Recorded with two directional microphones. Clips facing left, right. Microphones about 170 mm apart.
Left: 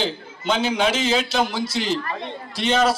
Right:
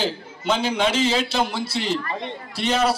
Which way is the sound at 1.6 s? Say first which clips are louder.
Left 1 dB; 30° right (ahead or behind).